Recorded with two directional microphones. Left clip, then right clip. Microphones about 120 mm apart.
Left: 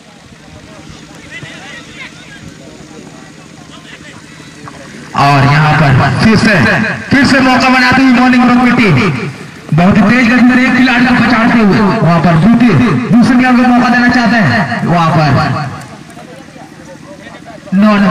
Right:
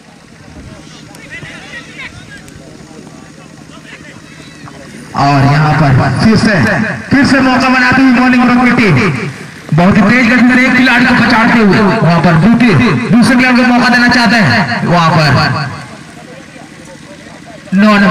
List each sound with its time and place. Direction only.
5.1 s a sound: 20° left (ahead or behind)
5.7 s a man's voice: 20° left (ahead or behind); by 15.7 s 15° right (ahead or behind)
17.7 s speech: 20° right (ahead or behind)